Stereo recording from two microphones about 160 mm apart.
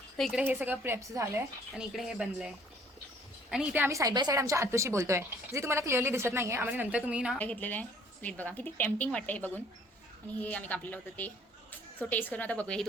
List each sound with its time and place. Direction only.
0.2 s a woman's voice: centre (ahead or behind); by 1.4 s 15° right (ahead or behind)
1.7 s speech: centre (ahead or behind)
3.5 s a woman's voice: 5° right (ahead or behind)
7.3 s a woman's voice: 10° left (ahead or behind)